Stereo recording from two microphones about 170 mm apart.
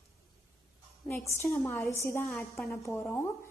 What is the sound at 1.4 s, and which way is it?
A woman's voice, 15° left (ahead or behind).